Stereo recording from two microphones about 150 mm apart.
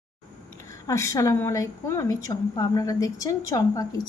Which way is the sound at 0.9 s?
20° left (ahead or behind).